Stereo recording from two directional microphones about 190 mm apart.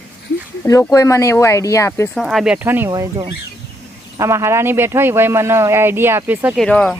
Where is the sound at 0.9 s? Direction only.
15° left (ahead or behind).